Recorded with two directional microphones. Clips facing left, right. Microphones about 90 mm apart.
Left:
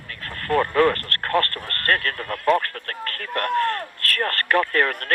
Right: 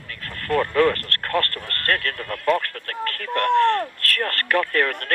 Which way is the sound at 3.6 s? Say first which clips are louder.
Right 6 dB; 60° right (ahead or behind).